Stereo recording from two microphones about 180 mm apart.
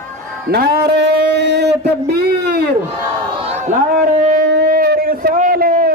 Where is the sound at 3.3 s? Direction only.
35° right (ahead or behind).